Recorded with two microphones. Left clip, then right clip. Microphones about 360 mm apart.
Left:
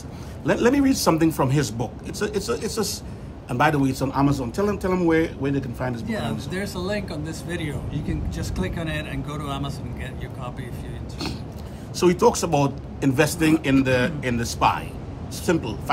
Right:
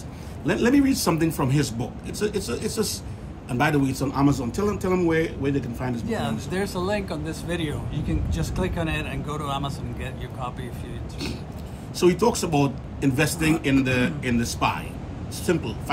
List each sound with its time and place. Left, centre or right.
0.5 s speech: centre
6.0 s speech: centre
12.0 s speech: centre